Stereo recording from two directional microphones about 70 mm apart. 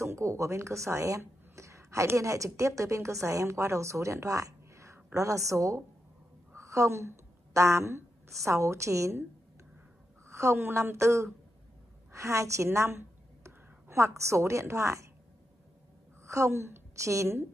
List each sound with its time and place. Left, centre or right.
0.0 s a woman's voice: right
6.5 s a sound: right
8.5 s a woman's voice: right
10.2 s a woman's voice: right
12.1 s a sound: right
14.0 s a woman's voice: right
16.3 s a woman's voice: right